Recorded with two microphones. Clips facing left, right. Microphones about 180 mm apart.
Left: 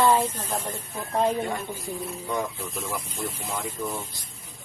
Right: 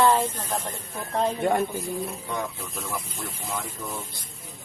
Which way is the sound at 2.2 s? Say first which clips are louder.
Left 2 dB; centre (ahead or behind).